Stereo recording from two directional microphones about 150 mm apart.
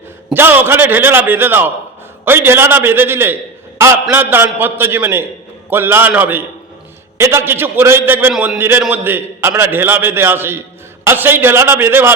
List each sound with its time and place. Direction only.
0.3 s a man's voice: 15° right (ahead or behind)